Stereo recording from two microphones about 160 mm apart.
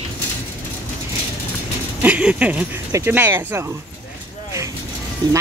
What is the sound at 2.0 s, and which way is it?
Speech, 10° right (ahead or behind).